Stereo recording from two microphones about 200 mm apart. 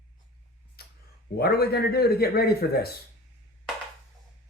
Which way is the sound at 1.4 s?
50° left (ahead or behind).